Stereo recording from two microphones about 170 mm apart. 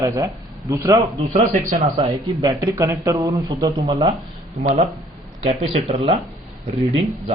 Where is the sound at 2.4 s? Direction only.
20° right (ahead or behind).